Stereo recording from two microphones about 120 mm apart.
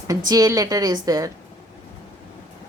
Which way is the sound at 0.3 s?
30° right (ahead or behind).